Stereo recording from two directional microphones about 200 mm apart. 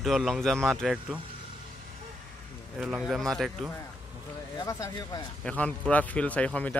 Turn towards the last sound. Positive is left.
turn(degrees=5)  # may be behind; listen again after turning